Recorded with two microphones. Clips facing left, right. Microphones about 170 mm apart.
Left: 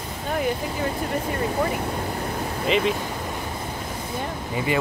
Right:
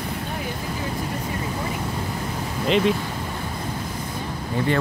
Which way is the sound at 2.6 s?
Centre (ahead or behind).